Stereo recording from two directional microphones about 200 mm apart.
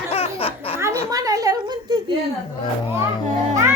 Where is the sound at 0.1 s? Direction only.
30° left (ahead or behind).